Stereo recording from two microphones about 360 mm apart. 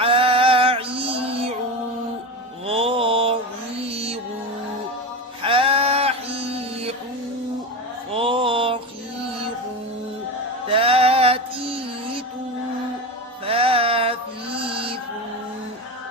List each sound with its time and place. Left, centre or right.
0.0 s music: centre
2.6 s mantra: centre
3.8 s music: centre
5.4 s a sound: centre
8.1 s a sound: centre
10.7 s mantra: centre
13.4 s music: centre